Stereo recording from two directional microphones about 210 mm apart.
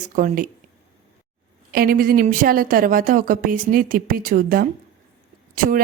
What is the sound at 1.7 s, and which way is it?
A woman's voice, 45° right (ahead or behind).